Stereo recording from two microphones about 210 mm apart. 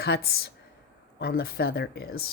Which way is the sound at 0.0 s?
50° left (ahead or behind).